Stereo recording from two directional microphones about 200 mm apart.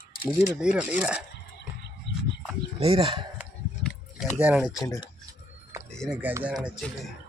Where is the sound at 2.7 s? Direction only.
25° right (ahead or behind).